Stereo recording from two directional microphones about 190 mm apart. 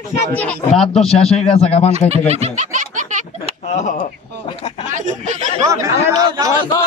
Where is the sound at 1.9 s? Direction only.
35° right (ahead or behind).